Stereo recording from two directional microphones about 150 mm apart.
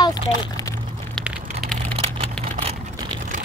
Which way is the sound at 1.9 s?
40° right (ahead or behind).